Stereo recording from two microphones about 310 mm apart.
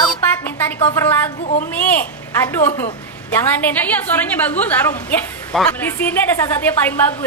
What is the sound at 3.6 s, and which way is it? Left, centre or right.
Speech, centre.